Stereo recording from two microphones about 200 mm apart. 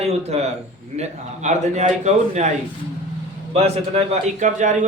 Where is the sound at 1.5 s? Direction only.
35° right (ahead or behind).